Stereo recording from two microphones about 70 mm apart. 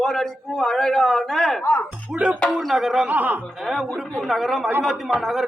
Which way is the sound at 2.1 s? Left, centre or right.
Centre.